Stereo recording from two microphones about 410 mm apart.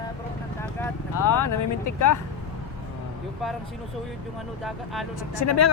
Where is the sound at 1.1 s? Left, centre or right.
Left.